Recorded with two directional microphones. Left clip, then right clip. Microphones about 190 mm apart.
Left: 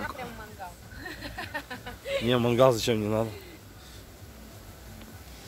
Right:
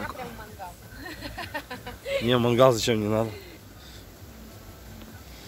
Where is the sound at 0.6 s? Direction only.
50° left (ahead or behind).